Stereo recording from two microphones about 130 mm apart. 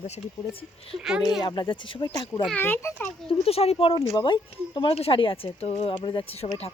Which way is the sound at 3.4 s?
50° left (ahead or behind).